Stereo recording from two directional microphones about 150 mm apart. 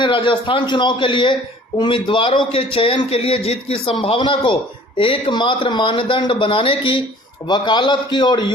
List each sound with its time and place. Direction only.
0.0 s a man's voice: 35° left (ahead or behind)